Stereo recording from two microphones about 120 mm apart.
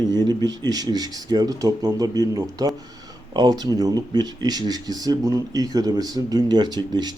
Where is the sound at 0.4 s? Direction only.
35° right (ahead or behind).